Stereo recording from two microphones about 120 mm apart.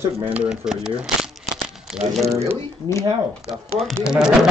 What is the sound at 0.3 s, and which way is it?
Speech, 5° right (ahead or behind).